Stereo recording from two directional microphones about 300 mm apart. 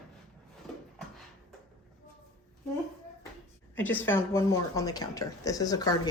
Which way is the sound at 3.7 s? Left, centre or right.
Centre.